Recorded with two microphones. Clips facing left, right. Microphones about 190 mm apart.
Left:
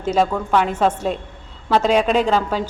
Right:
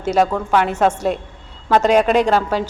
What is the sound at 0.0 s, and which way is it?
A woman's voice, 10° right (ahead or behind).